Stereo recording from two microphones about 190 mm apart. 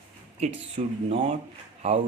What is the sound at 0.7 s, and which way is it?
Speech, 30° right (ahead or behind).